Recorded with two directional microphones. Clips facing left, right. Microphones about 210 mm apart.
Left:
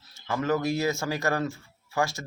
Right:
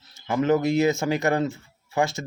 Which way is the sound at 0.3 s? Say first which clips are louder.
Right 5 dB; 20° right (ahead or behind).